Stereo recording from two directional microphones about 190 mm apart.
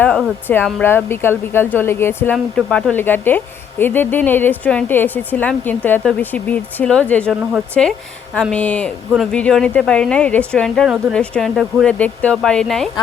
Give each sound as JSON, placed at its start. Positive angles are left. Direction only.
{"t": 0.0, "sound": "a woman's voice", "side_deg": 5}